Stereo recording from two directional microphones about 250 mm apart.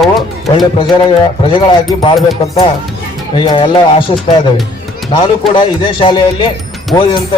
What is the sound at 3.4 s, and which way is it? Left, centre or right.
Speech, centre.